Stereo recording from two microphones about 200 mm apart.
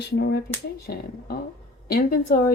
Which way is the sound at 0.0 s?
55° left (ahead or behind).